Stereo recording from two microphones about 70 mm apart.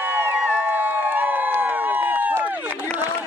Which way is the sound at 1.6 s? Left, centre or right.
Right.